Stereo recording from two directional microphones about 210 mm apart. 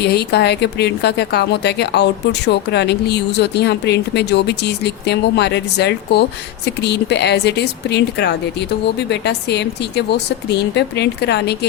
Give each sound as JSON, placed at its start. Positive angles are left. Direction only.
{"t": 0.0, "sound": "a woman's voice", "side_deg": 50}